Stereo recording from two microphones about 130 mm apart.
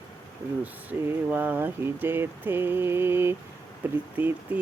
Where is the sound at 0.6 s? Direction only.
10° right (ahead or behind).